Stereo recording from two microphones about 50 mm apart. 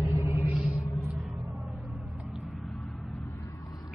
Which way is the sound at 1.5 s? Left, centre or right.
Centre.